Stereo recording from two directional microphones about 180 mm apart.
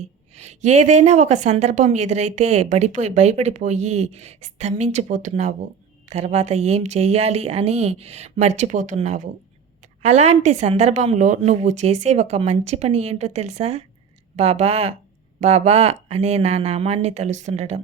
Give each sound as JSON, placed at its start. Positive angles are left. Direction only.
{"t": 0.3, "sound": "a woman's voice", "side_deg": -40}